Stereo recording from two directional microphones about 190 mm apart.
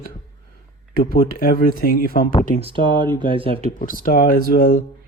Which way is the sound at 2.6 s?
25° right (ahead or behind).